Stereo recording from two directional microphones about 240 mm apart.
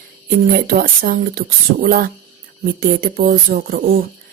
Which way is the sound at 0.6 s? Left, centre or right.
Right.